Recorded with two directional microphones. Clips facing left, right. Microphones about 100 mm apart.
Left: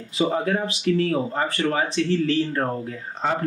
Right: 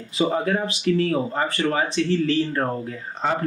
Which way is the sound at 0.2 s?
20° right (ahead or behind).